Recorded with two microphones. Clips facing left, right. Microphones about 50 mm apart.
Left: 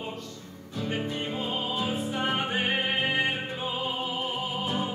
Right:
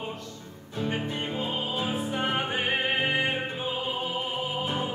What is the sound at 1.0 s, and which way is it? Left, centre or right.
Music, right.